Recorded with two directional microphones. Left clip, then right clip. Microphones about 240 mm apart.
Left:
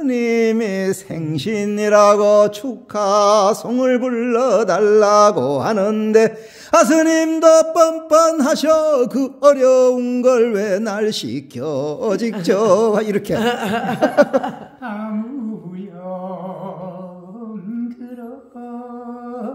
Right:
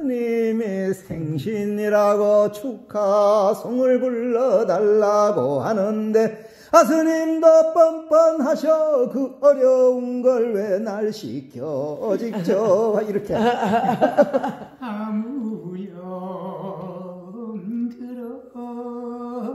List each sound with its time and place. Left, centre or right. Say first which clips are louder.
0.0 s music: left 5 dB; left
11.8 s speech: left 5 dB; left
12.7 s music: left 4 dB; left
13.4 s speech: even; centre
14.1 s music: left 6 dB; left
14.4 s a sound: left 2 dB; centre